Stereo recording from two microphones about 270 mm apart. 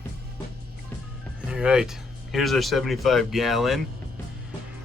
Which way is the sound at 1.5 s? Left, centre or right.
Centre.